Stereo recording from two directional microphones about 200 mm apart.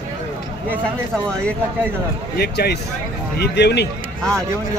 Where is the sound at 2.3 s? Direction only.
50° left (ahead or behind).